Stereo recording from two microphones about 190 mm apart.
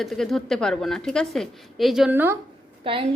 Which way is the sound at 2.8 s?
30° right (ahead or behind).